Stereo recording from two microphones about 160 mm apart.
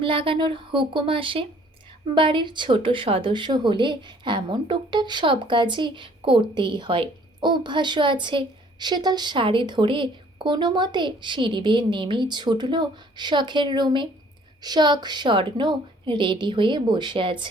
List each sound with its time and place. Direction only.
0.0 s a woman's voice: 35° right (ahead or behind)